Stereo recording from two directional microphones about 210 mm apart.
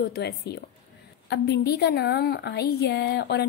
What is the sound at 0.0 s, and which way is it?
A woman's voice, 50° left (ahead or behind).